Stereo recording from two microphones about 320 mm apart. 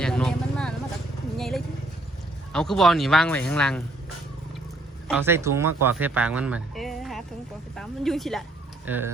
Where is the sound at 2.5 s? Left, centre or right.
Centre.